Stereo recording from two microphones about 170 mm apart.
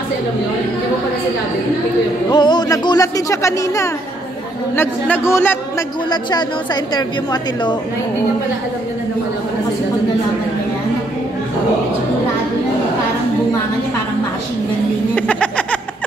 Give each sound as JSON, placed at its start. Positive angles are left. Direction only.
{"t": 2.2, "sound": "speech", "side_deg": 25}
{"t": 6.0, "sound": "speech", "side_deg": 25}
{"t": 15.1, "sound": "a sound", "side_deg": 5}